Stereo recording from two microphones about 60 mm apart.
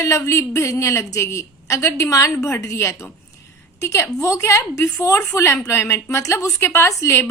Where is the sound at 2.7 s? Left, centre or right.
Left.